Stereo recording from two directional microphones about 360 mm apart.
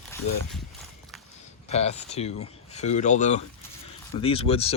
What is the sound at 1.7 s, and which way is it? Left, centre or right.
Speech, centre.